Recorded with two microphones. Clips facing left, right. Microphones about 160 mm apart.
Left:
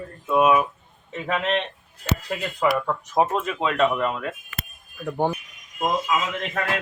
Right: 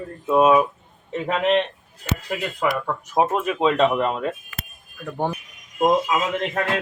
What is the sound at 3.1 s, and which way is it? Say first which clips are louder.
Speech: right 2 dB; 15° right (ahead or behind).